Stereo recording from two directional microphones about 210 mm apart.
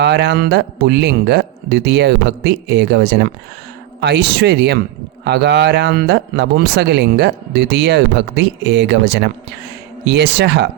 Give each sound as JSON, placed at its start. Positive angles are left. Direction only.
{"t": 0.0, "sound": "speech", "side_deg": -55}